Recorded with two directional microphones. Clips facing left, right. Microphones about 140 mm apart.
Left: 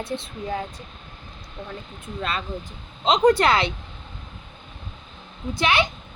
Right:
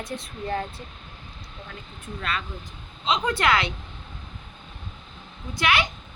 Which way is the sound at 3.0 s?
40° left (ahead or behind).